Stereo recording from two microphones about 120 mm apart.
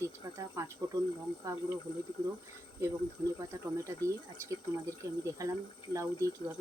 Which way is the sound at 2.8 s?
25° right (ahead or behind).